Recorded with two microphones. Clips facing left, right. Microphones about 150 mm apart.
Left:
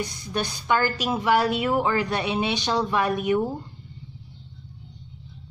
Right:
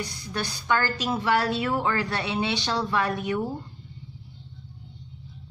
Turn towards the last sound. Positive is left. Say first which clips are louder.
# left 4 dB
turn(degrees=15)  # may be behind; listen again after turning